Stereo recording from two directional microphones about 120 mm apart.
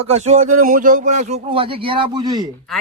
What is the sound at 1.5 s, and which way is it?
Speech, 50° right (ahead or behind).